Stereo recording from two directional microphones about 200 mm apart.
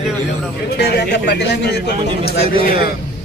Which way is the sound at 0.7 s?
55° left (ahead or behind).